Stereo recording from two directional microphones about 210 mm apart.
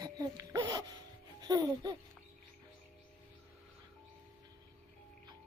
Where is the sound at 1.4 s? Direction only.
20° right (ahead or behind).